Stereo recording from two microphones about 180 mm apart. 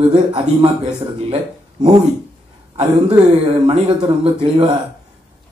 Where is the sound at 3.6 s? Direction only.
30° right (ahead or behind).